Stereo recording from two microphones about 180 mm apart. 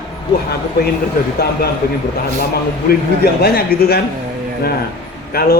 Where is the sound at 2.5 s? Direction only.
60° left (ahead or behind).